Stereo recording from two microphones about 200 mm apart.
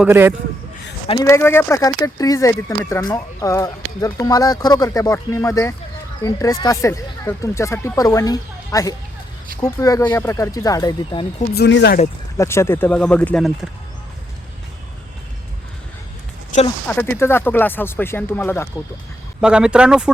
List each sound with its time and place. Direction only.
0.0 s a man's voice: 10° right (ahead or behind)
1.0 s speech: 25° left (ahead or behind)
1.3 s speech: 10° left (ahead or behind)
11.5 s speech: 55° left (ahead or behind)
12.4 s speech: 15° left (ahead or behind)
16.9 s speech: 10° left (ahead or behind)
19.4 s speech: 5° right (ahead or behind)